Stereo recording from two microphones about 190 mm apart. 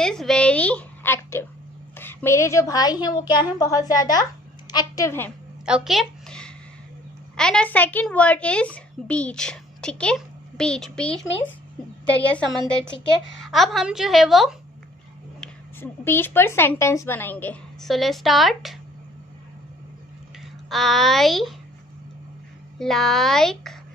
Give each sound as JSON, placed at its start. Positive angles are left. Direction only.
{"t": 0.0, "sound": "a woman's voice", "side_deg": 5}
{"t": 5.7, "sound": "a sound", "side_deg": 0}
{"t": 7.3, "sound": "a woman's voice", "side_deg": 5}
{"t": 12.2, "sound": "a woman's voice", "side_deg": 5}
{"t": 15.4, "sound": "a woman's voice", "side_deg": 10}
{"t": 20.7, "sound": "a woman's voice", "side_deg": 0}
{"t": 22.8, "sound": "a woman's voice", "side_deg": 0}